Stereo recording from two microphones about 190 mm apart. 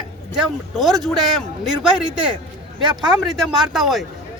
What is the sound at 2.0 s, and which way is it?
Speech, 25° right (ahead or behind).